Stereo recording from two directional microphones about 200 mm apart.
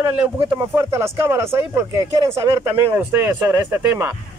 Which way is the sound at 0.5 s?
15° right (ahead or behind).